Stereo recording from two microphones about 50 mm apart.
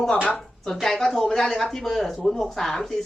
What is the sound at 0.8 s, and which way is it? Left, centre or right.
Speech, centre.